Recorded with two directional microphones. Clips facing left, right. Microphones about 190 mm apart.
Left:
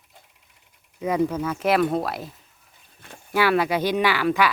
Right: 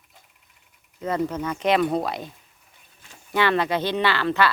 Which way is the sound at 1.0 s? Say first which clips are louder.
Left 3 dB; 10° left (ahead or behind).